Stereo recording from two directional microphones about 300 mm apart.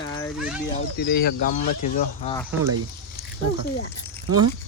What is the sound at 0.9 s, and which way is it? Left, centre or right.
Speech, left.